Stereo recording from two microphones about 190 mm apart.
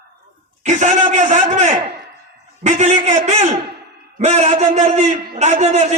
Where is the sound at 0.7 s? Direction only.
40° right (ahead or behind).